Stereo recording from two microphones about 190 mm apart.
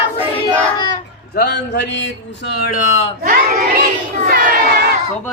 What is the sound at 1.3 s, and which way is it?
A man's voice, 60° left (ahead or behind).